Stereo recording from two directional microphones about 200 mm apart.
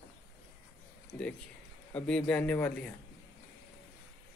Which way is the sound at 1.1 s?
5° left (ahead or behind).